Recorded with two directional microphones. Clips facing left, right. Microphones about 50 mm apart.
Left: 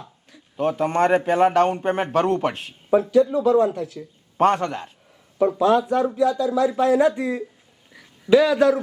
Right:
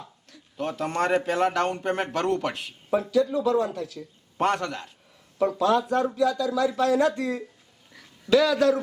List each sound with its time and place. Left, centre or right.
0.6 s speech: left